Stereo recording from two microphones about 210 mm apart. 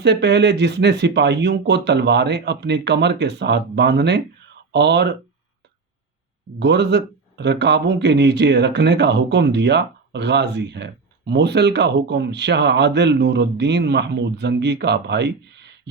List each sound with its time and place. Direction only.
0.0 s speech: 55° right (ahead or behind)
6.6 s speech: 55° right (ahead or behind)